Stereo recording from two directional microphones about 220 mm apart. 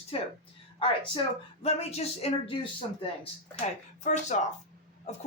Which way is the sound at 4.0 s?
30° left (ahead or behind).